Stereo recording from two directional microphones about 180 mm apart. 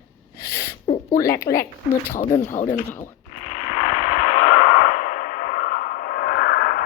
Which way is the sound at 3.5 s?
40° left (ahead or behind).